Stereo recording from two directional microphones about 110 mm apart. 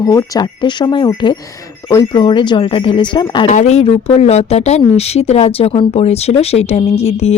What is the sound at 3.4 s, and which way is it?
Speech, 85° left.